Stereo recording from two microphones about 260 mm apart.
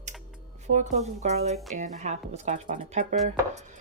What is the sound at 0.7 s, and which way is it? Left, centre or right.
A woman's voice, right.